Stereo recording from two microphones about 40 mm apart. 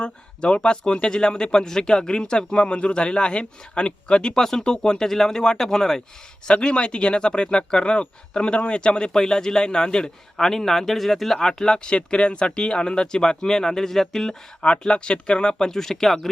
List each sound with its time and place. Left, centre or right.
0.0 s speech: left
6.5 s speech: left; by 11.3 s centre
11.3 s speech: centre
14.6 s speech: left; by 16.3 s centre